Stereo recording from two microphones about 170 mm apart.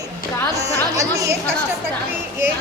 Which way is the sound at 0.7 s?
20° right (ahead or behind).